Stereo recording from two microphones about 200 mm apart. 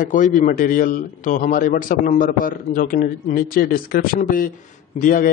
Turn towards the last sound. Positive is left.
turn(degrees=45)  # may be behind; listen again after turning